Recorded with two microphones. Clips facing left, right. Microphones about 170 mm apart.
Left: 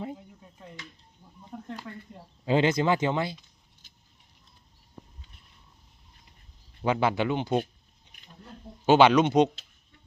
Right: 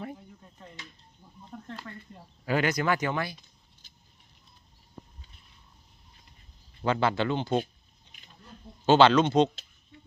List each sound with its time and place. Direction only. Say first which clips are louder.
1.5 s a sound: left 3 dB; 10° left (ahead or behind)
2.4 s speech: left 4 dB; 25° left (ahead or behind)
6.8 s speech: left 1 dB; 15° left (ahead or behind)
8.9 s speech: left 1 dB; 15° left (ahead or behind)